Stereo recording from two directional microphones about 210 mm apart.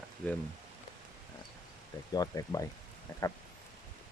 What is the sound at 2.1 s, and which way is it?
Speech, 15° left (ahead or behind).